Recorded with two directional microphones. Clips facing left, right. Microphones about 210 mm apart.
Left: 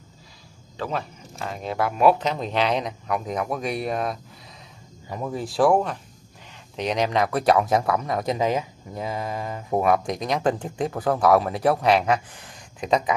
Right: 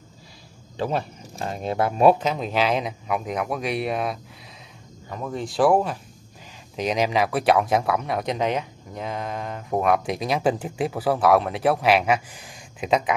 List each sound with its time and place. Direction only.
1.4 s speech: 30° right (ahead or behind)
2.1 s speech: 5° right (ahead or behind)
5.1 s speech: 10° left (ahead or behind)